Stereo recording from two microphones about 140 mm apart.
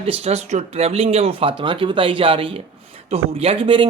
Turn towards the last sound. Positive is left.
turn(degrees=-35)  # may be behind; listen again after turning